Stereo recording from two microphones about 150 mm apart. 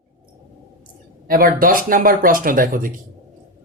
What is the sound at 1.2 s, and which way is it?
Speech, 75° right (ahead or behind).